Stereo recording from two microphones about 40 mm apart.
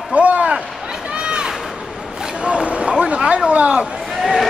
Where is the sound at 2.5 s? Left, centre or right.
Right.